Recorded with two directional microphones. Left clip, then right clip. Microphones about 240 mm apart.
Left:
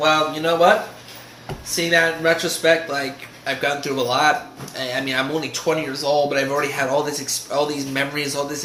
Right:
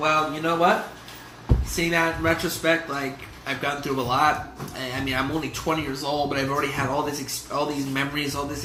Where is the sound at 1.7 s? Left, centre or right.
Centre.